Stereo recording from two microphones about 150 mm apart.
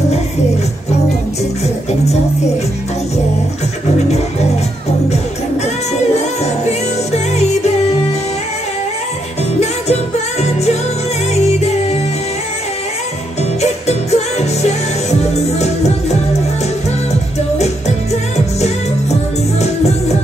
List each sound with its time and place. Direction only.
6.1 s music: 45° left (ahead or behind)
10.4 s music: 45° left (ahead or behind)
13.6 s music: 45° left (ahead or behind)